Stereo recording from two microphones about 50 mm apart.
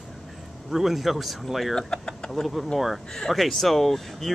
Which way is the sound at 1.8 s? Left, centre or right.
Centre.